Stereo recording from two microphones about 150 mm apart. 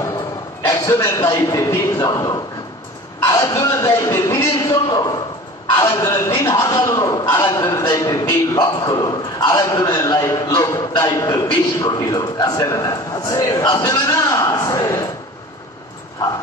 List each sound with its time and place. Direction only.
0.7 s a man's voice: 20° left (ahead or behind)